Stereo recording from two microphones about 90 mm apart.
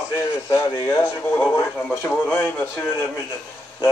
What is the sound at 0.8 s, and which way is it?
Speech, 30° left (ahead or behind).